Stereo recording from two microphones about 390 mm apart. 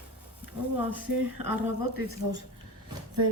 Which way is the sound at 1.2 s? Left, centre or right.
Right.